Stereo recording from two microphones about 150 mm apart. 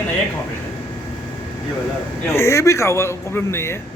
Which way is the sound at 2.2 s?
15° left (ahead or behind).